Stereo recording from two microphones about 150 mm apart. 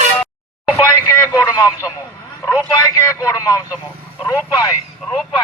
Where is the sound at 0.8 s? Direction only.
25° left (ahead or behind).